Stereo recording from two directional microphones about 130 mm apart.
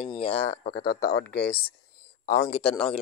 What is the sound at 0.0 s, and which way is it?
Speech, 50° left (ahead or behind).